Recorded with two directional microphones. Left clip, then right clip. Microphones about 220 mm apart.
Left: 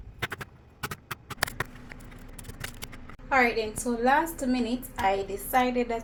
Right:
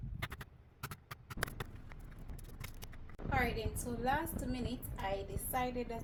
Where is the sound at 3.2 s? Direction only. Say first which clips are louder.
Left 13 dB; 15° right (ahead or behind).